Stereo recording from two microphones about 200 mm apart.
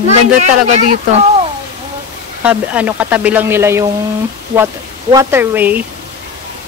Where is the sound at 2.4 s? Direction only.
5° right (ahead or behind).